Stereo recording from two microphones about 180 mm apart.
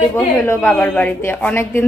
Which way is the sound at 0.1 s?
10° left (ahead or behind).